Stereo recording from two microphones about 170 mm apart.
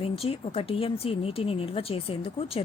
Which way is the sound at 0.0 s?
35° left (ahead or behind).